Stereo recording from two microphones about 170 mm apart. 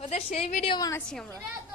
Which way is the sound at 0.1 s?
40° left (ahead or behind).